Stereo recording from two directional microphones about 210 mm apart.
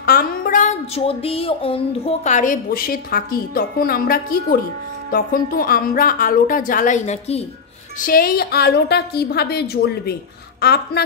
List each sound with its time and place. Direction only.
0.0 s speech: 45° left (ahead or behind)
8.0 s a woman's voice: 45° left (ahead or behind)